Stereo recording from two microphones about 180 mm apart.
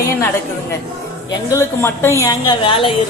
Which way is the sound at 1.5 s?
15° left (ahead or behind).